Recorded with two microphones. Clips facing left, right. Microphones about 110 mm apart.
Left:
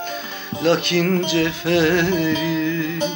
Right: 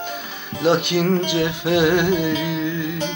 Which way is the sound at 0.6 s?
15° right (ahead or behind).